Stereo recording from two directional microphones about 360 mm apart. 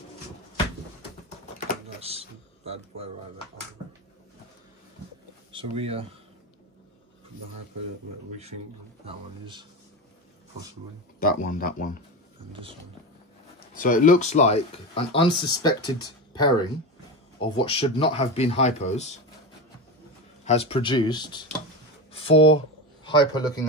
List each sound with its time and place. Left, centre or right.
2.0 s a sound: centre
3.8 s a sound: left
5.5 s speech: centre
9.0 s speech: centre
11.1 s speech: left
13.7 s speech: left
20.4 s speech: centre